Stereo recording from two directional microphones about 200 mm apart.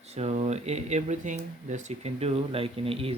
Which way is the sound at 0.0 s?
30° right (ahead or behind).